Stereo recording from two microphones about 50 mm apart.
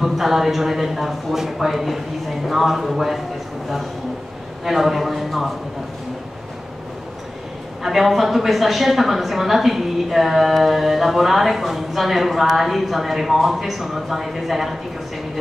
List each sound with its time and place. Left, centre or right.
0.0 s a woman's voice: centre
4.6 s a woman's voice: centre
7.8 s a woman's voice: centre